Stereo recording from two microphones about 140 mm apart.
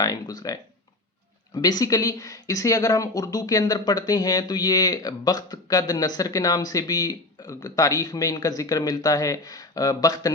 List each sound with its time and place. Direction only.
0.0 s speech: 25° left (ahead or behind)